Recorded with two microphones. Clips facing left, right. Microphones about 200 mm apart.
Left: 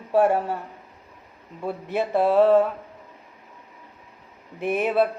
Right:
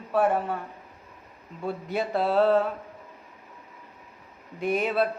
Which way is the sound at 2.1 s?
15° left (ahead or behind).